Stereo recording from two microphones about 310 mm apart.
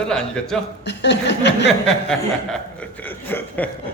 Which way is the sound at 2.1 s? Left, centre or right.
Centre.